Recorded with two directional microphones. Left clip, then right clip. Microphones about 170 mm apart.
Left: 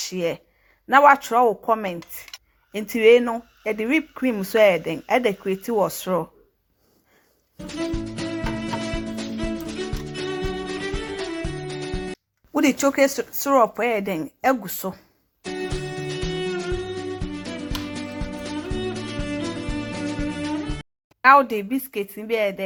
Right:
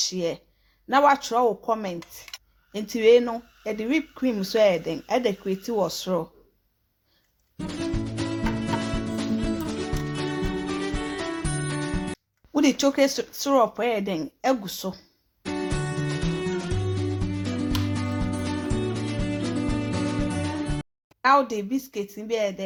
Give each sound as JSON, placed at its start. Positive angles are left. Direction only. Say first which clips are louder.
{"t": 0.1, "sound": "speech", "louder": "left 3 dB", "side_deg": 15}
{"t": 2.0, "sound": "speech", "louder": "left 1 dB", "side_deg": 0}
{"t": 2.7, "sound": "speech", "louder": "left 3 dB", "side_deg": 15}
{"t": 4.8, "sound": "speech", "louder": "left 2 dB", "side_deg": 0}
{"t": 5.0, "sound": "speech", "louder": "left 4 dB", "side_deg": 15}
{"t": 5.4, "sound": "speech", "louder": "left 3 dB", "side_deg": 0}
{"t": 6.1, "sound": "speech", "louder": "left 3 dB", "side_deg": 15}
{"t": 7.8, "sound": "music", "louder": "left 2 dB", "side_deg": 0}
{"t": 12.5, "sound": "speech", "louder": "left 2 dB", "side_deg": 20}
{"t": 15.5, "sound": "music", "louder": "even", "side_deg": 0}
{"t": 21.2, "sound": "speech", "louder": "left 5 dB", "side_deg": 20}